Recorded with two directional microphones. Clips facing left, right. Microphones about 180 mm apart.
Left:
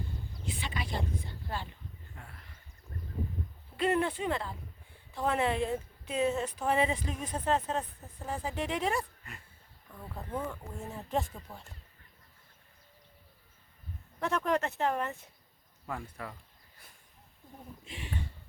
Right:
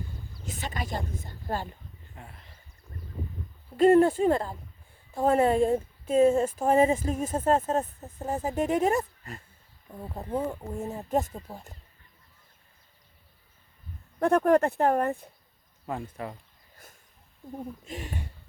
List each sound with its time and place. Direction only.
0.4 s speech: 45° right (ahead or behind)
2.1 s a sound: 20° right (ahead or behind)
3.8 s speech: 45° right (ahead or behind)
9.9 s speech: 30° right (ahead or behind)
14.2 s speech: 55° right (ahead or behind)
15.9 s speech: 25° right (ahead or behind)
17.8 s speech: 45° right (ahead or behind)